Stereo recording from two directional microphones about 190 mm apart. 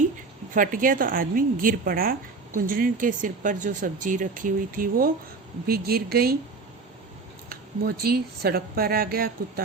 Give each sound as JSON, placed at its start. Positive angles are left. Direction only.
{"t": 0.5, "sound": "a woman's voice", "side_deg": -45}
{"t": 7.5, "sound": "a woman's voice", "side_deg": -50}